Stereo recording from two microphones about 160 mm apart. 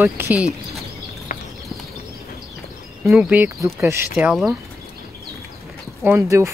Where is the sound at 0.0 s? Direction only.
10° right (ahead or behind).